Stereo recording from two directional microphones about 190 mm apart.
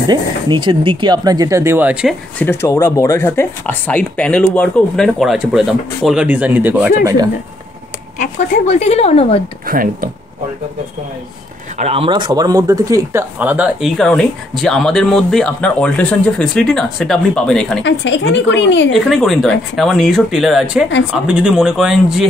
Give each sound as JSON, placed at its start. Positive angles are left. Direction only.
{"t": 0.1, "sound": "speech", "side_deg": -25}
{"t": 2.3, "sound": "speech", "side_deg": 10}
{"t": 8.6, "sound": "speech", "side_deg": 35}
{"t": 9.7, "sound": "speech", "side_deg": -50}
{"t": 11.8, "sound": "speech", "side_deg": -30}
{"t": 17.8, "sound": "a woman's voice", "side_deg": 75}
{"t": 18.9, "sound": "speech", "side_deg": 0}